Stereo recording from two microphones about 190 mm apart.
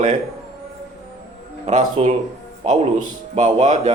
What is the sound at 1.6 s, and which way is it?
Speech, 35° right (ahead or behind).